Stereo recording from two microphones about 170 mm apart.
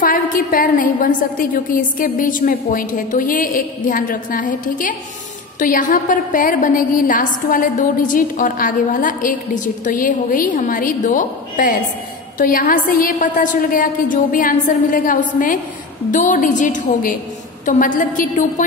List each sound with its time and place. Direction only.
0.0 s a woman's voice: 55° left (ahead or behind)